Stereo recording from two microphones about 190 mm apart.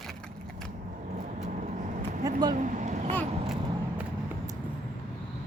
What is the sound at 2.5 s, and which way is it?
Vehicle, 40° right (ahead or behind).